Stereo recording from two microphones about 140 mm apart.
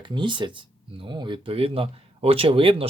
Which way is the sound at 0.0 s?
35° right (ahead or behind).